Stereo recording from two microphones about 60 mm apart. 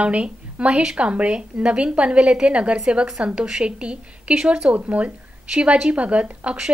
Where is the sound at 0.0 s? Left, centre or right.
Right.